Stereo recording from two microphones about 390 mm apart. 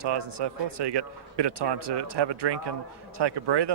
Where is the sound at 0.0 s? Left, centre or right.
Right.